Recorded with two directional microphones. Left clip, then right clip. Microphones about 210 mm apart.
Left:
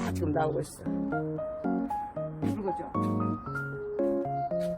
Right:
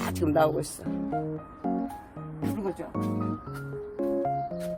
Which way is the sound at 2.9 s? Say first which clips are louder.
Left 1 dB; centre (ahead or behind).